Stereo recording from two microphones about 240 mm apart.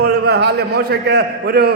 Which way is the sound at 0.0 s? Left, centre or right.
Right.